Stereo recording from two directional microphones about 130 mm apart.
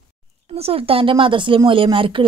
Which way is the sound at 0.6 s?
45° right (ahead or behind).